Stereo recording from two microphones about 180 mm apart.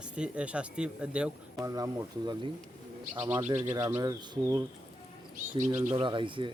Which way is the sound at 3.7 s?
20° right (ahead or behind).